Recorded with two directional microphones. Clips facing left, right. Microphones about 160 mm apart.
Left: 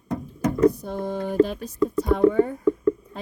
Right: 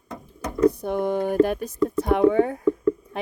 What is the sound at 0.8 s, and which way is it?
Speech, 60° right (ahead or behind).